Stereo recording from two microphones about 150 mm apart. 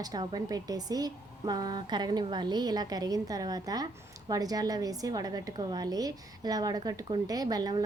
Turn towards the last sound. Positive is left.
turn(degrees=-25)  # may be behind; listen again after turning